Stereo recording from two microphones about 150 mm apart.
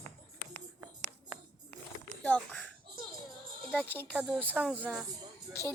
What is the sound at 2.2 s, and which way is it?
Speech, 10° left (ahead or behind).